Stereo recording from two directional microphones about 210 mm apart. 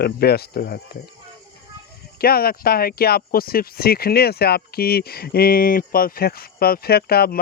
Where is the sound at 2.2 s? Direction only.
45° left (ahead or behind).